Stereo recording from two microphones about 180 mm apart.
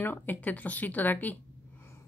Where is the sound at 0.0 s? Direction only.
10° left (ahead or behind).